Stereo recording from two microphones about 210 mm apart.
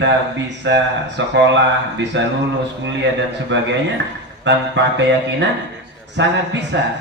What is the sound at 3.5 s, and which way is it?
Speech, 60° right (ahead or behind).